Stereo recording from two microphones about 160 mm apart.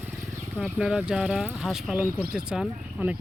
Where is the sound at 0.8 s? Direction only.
5° right (ahead or behind).